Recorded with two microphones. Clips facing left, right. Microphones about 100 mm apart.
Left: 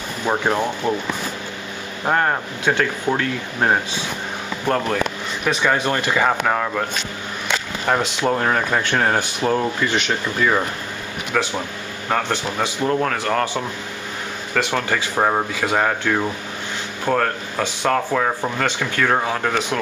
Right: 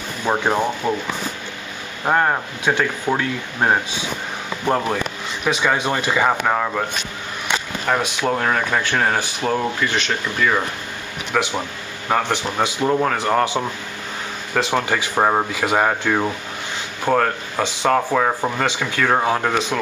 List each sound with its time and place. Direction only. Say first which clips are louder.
0.2 s speech: right 1 dB; 10° right (ahead or behind)
2.0 s speech: right 1 dB; 5° right (ahead or behind)
7.9 s speech: left 1 dB; 5° left (ahead or behind)
9.8 s speech: left 1 dB; 15° left (ahead or behind)
11.3 s speech: right 1 dB; 5° right (ahead or behind)